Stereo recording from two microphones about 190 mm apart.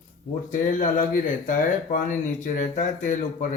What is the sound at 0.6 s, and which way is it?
A man's voice, 45° left (ahead or behind).